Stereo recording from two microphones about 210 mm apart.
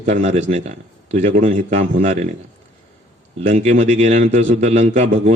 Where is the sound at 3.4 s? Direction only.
30° right (ahead or behind).